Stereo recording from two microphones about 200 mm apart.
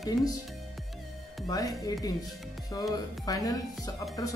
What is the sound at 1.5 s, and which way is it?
Speech, 20° left (ahead or behind).